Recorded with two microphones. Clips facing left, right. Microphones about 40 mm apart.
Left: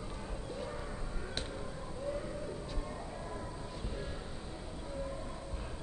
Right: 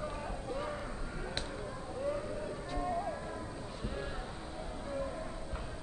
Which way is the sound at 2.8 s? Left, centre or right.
Right.